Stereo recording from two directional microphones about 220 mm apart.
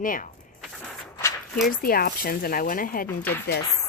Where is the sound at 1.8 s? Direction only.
45° left (ahead or behind).